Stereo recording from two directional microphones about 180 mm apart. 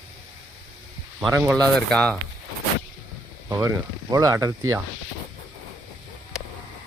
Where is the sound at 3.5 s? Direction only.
15° right (ahead or behind).